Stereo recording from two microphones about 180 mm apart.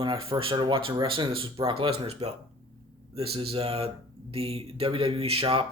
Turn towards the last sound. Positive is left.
turn(degrees=-30)  # may be behind; listen again after turning